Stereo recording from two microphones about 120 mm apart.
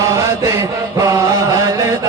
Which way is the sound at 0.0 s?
25° right (ahead or behind).